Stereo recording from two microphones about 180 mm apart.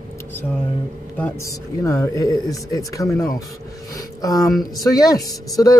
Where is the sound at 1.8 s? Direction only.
15° left (ahead or behind).